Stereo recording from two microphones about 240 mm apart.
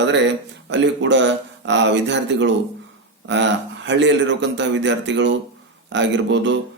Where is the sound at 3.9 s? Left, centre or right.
Right.